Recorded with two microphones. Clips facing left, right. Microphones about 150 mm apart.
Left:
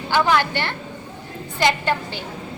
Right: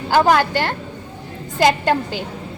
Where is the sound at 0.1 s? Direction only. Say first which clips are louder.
Right 4 dB; 45° right (ahead or behind).